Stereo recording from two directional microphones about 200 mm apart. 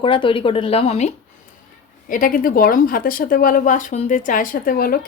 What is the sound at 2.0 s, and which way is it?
Speech, 45° left (ahead or behind).